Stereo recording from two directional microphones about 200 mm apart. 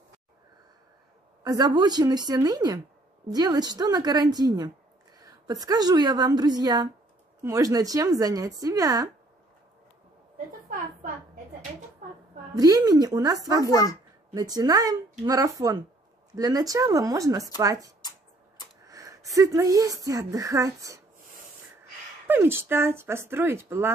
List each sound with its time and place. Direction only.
1.4 s a woman's voice: 20° right (ahead or behind)
12.5 s a woman's voice: 20° right (ahead or behind)
22.3 s a woman's voice: 10° right (ahead or behind)